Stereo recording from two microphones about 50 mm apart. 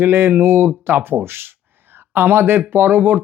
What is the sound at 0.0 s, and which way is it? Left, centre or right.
Speech, right.